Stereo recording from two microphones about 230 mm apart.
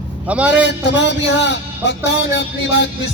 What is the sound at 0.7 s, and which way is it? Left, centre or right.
A man's voice, left.